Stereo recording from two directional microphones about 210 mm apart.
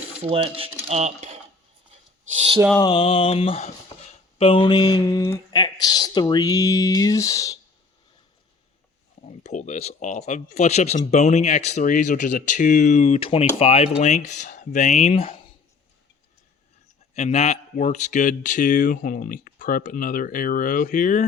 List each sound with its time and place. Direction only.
0.2 s speech: 25° right (ahead or behind)
2.7 s speech: 20° left (ahead or behind)
9.4 s speech: 35° left (ahead or behind)
17.2 s speech: 30° left (ahead or behind)